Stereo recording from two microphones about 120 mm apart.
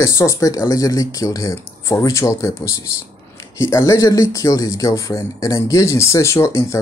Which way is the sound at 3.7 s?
25° left (ahead or behind).